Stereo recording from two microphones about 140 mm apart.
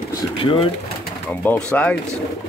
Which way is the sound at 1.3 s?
10° left (ahead or behind).